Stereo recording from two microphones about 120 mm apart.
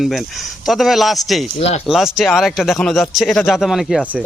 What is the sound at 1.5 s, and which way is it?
Speech, 60° left (ahead or behind).